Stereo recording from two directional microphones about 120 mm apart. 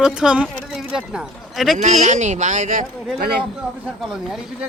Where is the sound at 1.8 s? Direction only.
80° right.